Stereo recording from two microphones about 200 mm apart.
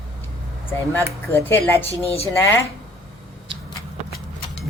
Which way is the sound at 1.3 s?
10° left (ahead or behind).